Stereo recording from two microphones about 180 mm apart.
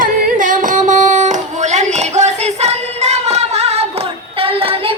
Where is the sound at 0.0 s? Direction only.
50° right (ahead or behind).